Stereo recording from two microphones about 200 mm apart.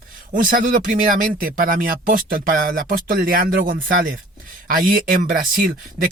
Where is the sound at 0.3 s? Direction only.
45° right (ahead or behind).